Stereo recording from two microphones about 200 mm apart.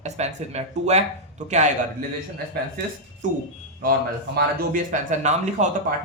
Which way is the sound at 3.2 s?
40° right (ahead or behind).